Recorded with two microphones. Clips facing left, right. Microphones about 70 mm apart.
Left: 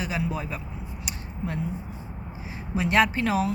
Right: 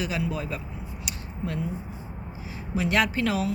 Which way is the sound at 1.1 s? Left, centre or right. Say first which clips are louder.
Left 1 dB; left.